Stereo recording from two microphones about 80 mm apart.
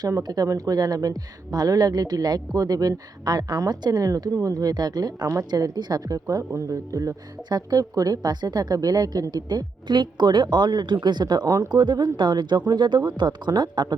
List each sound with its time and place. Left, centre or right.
0.2 s speech: right
11.4 s speech: right
11.7 s speech: right